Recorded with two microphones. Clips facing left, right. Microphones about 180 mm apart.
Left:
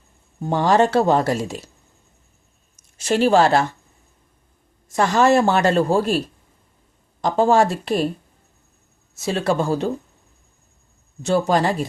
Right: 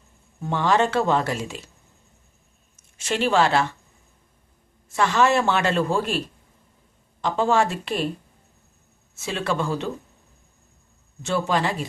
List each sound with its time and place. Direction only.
0.4 s speech: 40° left (ahead or behind)
3.0 s speech: 40° left (ahead or behind)
4.9 s speech: 40° left (ahead or behind)
9.1 s speech: 40° left (ahead or behind)
11.2 s speech: 40° left (ahead or behind)